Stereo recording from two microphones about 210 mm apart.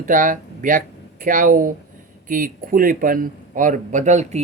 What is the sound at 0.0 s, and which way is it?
Speech, 40° right (ahead or behind).